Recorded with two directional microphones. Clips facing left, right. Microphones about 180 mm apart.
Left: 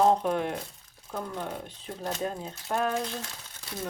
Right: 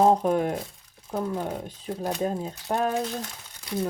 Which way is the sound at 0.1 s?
45° right (ahead or behind).